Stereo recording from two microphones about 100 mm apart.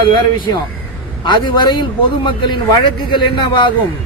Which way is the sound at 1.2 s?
50° left (ahead or behind).